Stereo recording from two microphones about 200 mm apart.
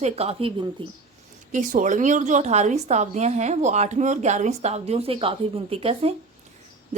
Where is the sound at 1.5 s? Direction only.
40° right (ahead or behind).